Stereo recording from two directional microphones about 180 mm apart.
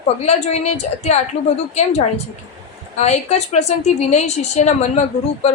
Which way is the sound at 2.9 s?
40° left (ahead or behind).